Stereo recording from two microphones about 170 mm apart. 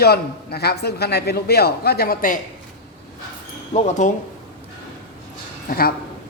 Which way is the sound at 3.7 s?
40° left (ahead or behind).